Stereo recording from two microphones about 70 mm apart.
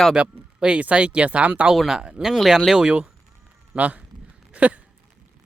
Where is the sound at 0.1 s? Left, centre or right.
Centre.